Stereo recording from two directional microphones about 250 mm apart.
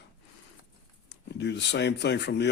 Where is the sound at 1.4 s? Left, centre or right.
Left.